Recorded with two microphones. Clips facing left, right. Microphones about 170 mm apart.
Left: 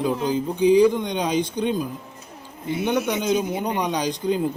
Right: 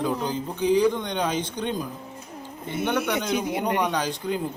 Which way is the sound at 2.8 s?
10° left (ahead or behind).